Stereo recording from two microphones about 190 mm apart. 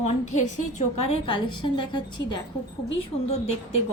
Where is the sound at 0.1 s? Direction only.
40° left (ahead or behind); by 2.4 s 25° left (ahead or behind).